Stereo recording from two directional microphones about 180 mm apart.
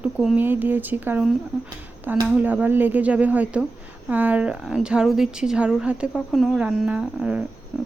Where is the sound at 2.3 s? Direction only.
10° right (ahead or behind).